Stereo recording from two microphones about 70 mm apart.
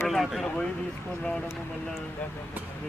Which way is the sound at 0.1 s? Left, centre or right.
Centre.